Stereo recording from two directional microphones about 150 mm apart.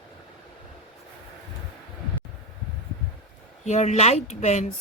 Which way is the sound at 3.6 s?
50° left (ahead or behind).